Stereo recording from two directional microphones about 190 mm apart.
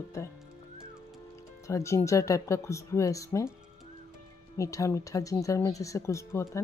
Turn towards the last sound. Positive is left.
turn(degrees=15)  # may be behind; listen again after turning